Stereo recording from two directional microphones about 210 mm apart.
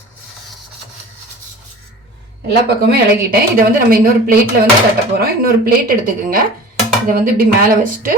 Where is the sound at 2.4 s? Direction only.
50° right (ahead or behind).